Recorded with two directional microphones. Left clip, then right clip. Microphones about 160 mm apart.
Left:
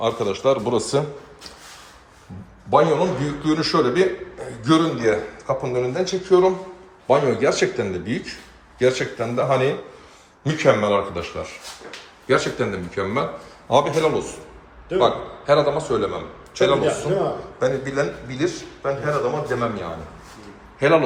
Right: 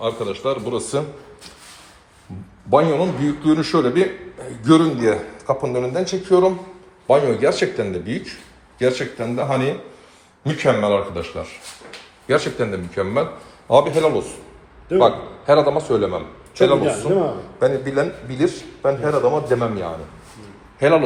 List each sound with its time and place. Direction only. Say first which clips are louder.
0.0 s a man's voice: left 2 dB; 15° left (ahead or behind)
2.6 s a man's voice: right 1 dB; centre (ahead or behind)
17.9 s a man's voice: right 3 dB; 30° right (ahead or behind)
18.8 s a man's voice: right 5 dB; 10° right (ahead or behind)
20.7 s a man's voice: right 2 dB; 10° left (ahead or behind)